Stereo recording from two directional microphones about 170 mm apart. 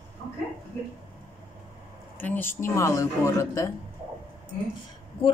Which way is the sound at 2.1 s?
10° left (ahead or behind).